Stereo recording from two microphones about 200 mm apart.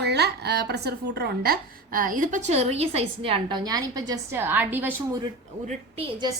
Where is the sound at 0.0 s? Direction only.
55° right (ahead or behind).